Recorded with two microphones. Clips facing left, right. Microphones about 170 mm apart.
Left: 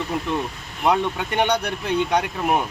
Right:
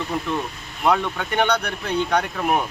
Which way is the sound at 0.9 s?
20° left (ahead or behind).